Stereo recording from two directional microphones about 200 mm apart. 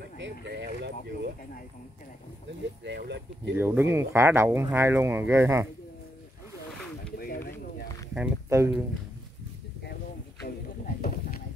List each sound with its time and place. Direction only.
0.2 s speech: 60° right (ahead or behind)
2.8 s speech: 60° right (ahead or behind)
3.5 s speech: 10° right (ahead or behind)
7.2 s a sound: 50° left (ahead or behind)
8.5 s speech: 15° right (ahead or behind)
10.4 s a sound: 50° left (ahead or behind)